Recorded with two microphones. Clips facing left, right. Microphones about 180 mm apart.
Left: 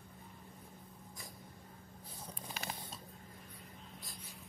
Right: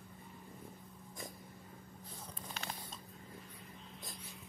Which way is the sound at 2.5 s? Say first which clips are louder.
Left 1 dB; 5° left (ahead or behind).